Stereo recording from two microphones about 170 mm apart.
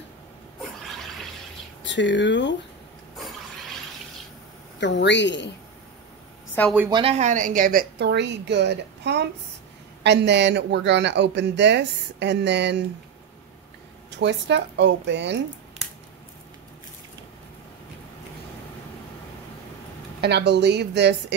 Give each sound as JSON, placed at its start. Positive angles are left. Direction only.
{"t": 1.8, "sound": "speech", "side_deg": 90}
{"t": 4.7, "sound": "speech", "side_deg": 90}
{"t": 6.6, "sound": "a woman's voice", "side_deg": 10}
{"t": 6.9, "sound": "a woman's voice", "side_deg": -35}
{"t": 8.0, "sound": "speech", "side_deg": -85}
{"t": 14.1, "sound": "speech", "side_deg": -90}
{"t": 20.2, "sound": "speech", "side_deg": -80}